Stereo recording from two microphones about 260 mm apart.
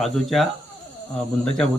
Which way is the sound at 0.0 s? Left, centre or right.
Centre.